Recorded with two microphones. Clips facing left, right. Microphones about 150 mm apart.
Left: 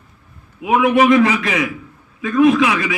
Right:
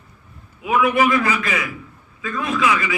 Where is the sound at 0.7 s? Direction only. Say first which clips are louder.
Left 5 dB; 90° left.